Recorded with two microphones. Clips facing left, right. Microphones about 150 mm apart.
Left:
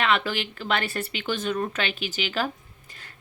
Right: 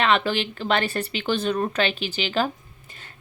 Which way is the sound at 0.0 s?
30° right (ahead or behind).